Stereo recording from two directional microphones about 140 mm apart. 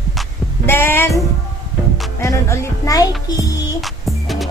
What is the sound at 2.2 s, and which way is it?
A woman's voice, 20° left (ahead or behind).